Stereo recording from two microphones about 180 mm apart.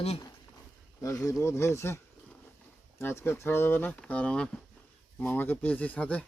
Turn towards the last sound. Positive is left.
turn(degrees=10)  # may be behind; listen again after turning